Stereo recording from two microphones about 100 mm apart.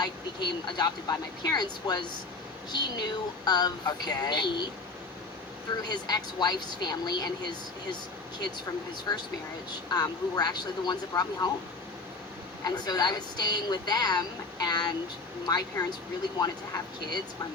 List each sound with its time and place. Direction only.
0.0 s speech: 40° left (ahead or behind)
5.9 s speech: 45° left (ahead or behind)
9.1 s speech: 45° left (ahead or behind)
12.6 s speech: 40° left (ahead or behind)